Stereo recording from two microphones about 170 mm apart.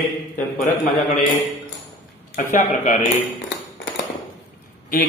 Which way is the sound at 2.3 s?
50° left (ahead or behind).